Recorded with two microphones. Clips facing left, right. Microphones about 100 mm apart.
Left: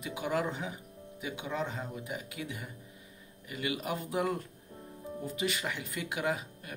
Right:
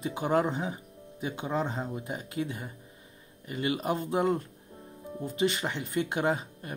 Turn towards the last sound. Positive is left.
turn(degrees=-35)  # may be behind; listen again after turning